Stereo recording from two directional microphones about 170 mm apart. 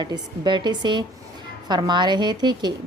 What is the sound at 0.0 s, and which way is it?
A woman's voice, 25° right (ahead or behind).